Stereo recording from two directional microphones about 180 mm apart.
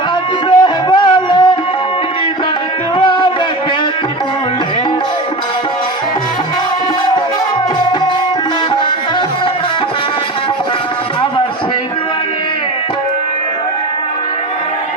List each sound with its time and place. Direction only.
0.6 s music: 25° left (ahead or behind)
3.0 s music: 25° left (ahead or behind)